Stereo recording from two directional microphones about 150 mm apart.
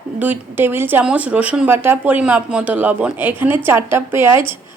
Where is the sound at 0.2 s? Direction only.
10° right (ahead or behind).